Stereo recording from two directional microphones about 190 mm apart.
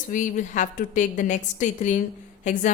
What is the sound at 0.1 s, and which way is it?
A woman's voice, 40° left (ahead or behind).